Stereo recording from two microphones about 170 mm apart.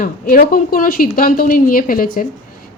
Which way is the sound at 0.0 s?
55° left (ahead or behind).